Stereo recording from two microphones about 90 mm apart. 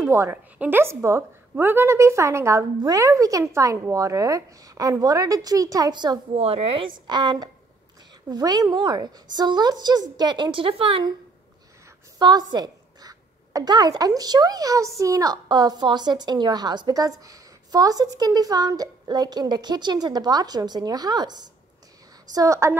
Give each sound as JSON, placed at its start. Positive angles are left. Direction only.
{"t": 0.0, "sound": "a woman's voice", "side_deg": -30}
{"t": 6.3, "sound": "a woman's voice", "side_deg": -90}
{"t": 7.1, "sound": "a woman's voice", "side_deg": -55}
{"t": 12.2, "sound": "speech", "side_deg": -50}
{"t": 22.3, "sound": "a woman's voice", "side_deg": -40}